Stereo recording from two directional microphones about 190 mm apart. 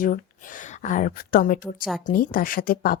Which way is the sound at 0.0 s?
45° left (ahead or behind).